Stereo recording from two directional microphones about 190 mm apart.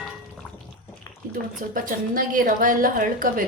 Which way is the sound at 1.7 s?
45° right (ahead or behind).